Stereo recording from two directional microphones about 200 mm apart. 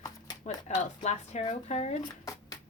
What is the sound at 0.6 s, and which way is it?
A woman's voice, 35° left (ahead or behind).